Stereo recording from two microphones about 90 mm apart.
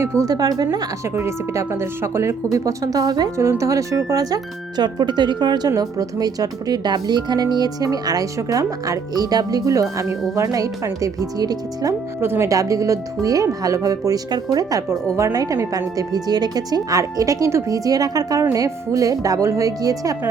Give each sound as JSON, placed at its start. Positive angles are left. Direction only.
{"t": 0.0, "sound": "speech", "side_deg": -35}
{"t": 1.0, "sound": "speech", "side_deg": -30}
{"t": 4.8, "sound": "speech", "side_deg": -55}
{"t": 12.2, "sound": "speech", "side_deg": -25}
{"t": 12.5, "sound": "speech", "side_deg": -40}